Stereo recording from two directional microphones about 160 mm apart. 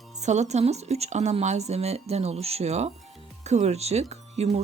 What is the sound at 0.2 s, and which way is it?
Speech, 45° right (ahead or behind).